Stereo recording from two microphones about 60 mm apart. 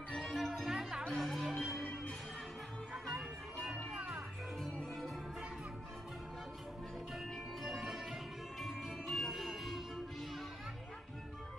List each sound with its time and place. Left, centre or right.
0.2 s music: centre
0.7 s music: centre
1.1 s music: centre
2.9 s music: centre
3.7 s music: centre
4.6 s music: centre
7.6 s music: centre